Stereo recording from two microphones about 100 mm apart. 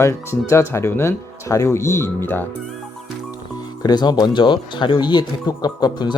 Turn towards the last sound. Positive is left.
turn(degrees=45)  # may be behind; listen again after turning